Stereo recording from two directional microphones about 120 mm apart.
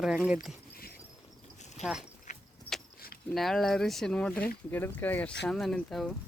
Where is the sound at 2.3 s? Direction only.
90° left.